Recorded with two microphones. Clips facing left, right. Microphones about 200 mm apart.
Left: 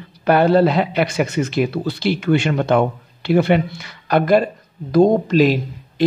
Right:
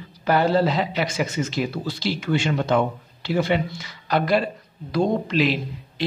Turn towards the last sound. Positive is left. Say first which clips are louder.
# left 7 dB
turn(degrees=45)  # may be behind; listen again after turning